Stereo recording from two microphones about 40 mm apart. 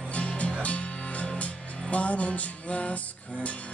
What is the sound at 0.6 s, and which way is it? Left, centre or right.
Music, left.